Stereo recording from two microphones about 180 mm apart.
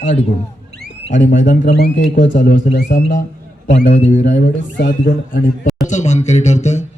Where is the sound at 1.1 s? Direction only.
40° left (ahead or behind).